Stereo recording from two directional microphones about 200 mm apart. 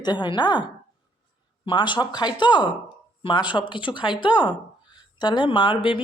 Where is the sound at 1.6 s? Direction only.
25° left (ahead or behind).